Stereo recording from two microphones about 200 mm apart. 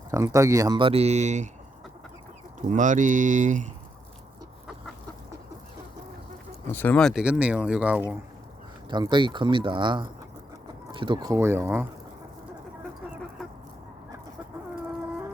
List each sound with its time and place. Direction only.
0.1 s speech: 15° right (ahead or behind); by 1.5 s 35° right (ahead or behind)
2.6 s speech: 40° right (ahead or behind)
6.7 s speech: 10° left (ahead or behind); by 8.1 s 5° right (ahead or behind)
8.9 s speech: 20° right (ahead or behind)